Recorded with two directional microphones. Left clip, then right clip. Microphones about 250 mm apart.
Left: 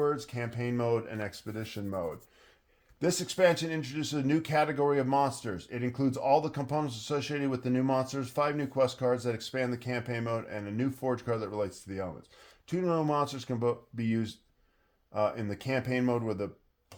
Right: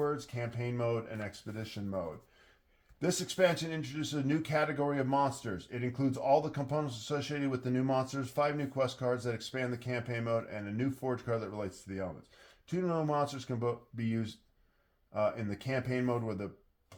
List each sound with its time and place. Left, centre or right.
0.0 s speech: left
3.3 s speech: left